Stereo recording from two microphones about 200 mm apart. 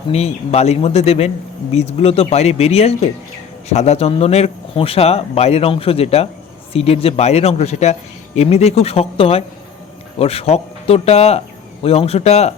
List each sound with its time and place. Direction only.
0.1 s speech: 30° left (ahead or behind)